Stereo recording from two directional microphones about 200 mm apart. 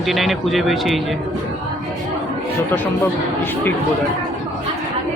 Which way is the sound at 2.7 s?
10° left (ahead or behind).